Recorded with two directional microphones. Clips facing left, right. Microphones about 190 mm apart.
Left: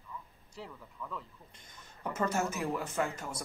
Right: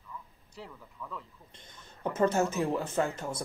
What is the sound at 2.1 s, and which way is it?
Speech, 30° right (ahead or behind).